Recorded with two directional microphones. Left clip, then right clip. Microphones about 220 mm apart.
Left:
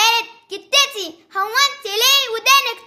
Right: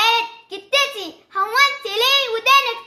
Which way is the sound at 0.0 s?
45° left (ahead or behind).